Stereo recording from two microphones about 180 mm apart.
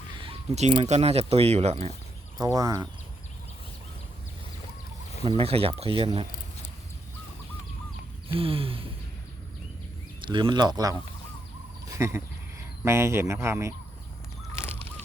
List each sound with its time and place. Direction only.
0.2 s speech: 35° right (ahead or behind)
2.4 s speech: 20° right (ahead or behind)
5.2 s speech: 30° right (ahead or behind)
8.4 s speech: 30° right (ahead or behind)
10.2 s speech: 25° right (ahead or behind)